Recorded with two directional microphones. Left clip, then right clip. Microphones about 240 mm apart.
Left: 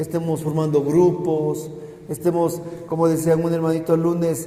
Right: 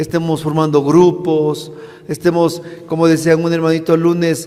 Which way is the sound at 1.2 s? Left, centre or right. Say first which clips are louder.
Right 6 dB; right.